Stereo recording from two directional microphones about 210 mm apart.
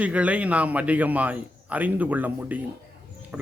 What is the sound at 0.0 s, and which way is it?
A man's voice, 5° right (ahead or behind).